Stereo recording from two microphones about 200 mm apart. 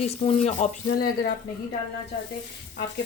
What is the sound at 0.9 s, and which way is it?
Speech, 50° left (ahead or behind).